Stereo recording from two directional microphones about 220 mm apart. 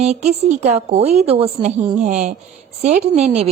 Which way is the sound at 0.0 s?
30° right (ahead or behind).